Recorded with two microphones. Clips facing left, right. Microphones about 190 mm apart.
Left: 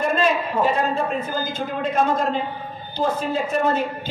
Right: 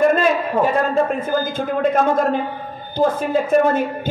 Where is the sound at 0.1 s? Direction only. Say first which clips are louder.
Right 4 dB; 50° right (ahead or behind).